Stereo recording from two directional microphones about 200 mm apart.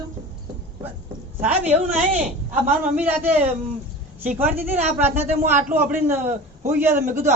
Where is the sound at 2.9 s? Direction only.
10° right (ahead or behind).